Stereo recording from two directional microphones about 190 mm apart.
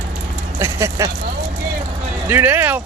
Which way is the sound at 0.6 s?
15° right (ahead or behind).